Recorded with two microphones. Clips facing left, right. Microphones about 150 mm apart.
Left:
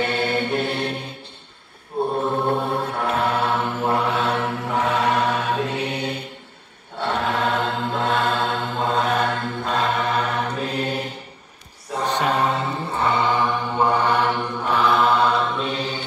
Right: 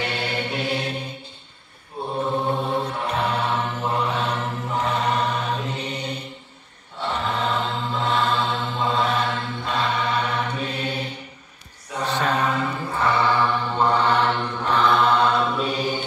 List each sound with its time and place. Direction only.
0.0 s music: 50° left (ahead or behind)
2.4 s mantra: 65° left (ahead or behind); by 11.1 s 40° left (ahead or behind)
12.4 s music: 30° left (ahead or behind); by 16.0 s 10° right (ahead or behind)